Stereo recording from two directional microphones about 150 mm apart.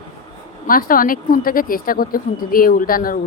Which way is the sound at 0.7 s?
70° left (ahead or behind).